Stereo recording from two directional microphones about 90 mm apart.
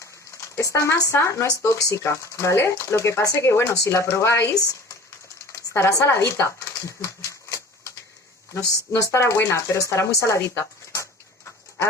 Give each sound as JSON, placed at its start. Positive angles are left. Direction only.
{"t": 0.5, "sound": "speech", "side_deg": 35}
{"t": 5.5, "sound": "a sound", "side_deg": 30}
{"t": 9.1, "sound": "speech", "side_deg": 30}